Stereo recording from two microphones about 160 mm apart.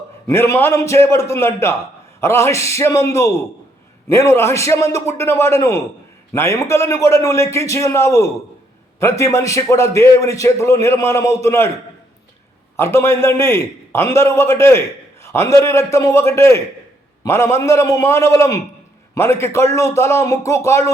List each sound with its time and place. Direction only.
0.3 s a man's voice: 15° left (ahead or behind)
12.7 s a man's voice: 15° left (ahead or behind)